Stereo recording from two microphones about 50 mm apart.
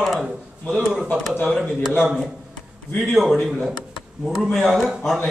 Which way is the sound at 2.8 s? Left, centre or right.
Left.